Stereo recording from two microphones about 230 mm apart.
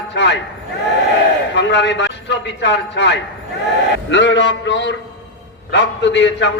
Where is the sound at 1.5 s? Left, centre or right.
Left.